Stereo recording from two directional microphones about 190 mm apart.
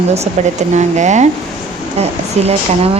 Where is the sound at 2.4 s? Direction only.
35° right (ahead or behind).